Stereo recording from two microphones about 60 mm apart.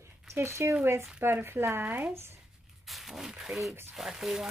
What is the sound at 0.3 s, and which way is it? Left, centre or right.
Speech, right.